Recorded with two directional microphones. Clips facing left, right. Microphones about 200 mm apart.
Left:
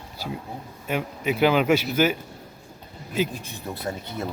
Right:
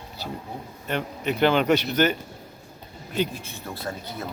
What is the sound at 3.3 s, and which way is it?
Speech, 15° left (ahead or behind).